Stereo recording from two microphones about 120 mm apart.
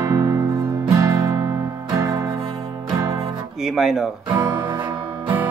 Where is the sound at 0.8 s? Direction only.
30° right (ahead or behind).